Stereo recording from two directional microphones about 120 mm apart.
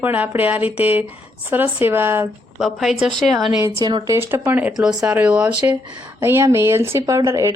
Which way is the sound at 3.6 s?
35° right (ahead or behind).